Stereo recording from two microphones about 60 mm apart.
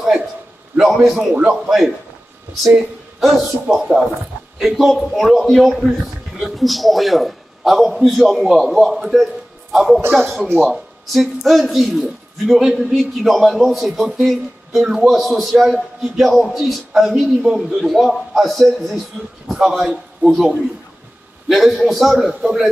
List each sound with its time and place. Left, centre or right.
0.7 s a man's voice: centre
1.3 s a man's voice: centre
3.6 s a man's voice: centre